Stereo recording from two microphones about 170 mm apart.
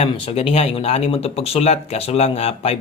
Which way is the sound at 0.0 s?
35° left (ahead or behind).